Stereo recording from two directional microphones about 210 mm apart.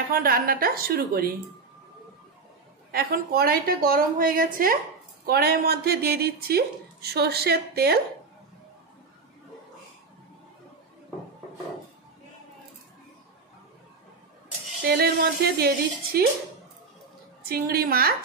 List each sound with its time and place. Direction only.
0.1 s speech: 45° right (ahead or behind)
2.9 s speech: 45° right (ahead or behind)
14.9 s speech: 50° right (ahead or behind)
17.5 s speech: 45° right (ahead or behind)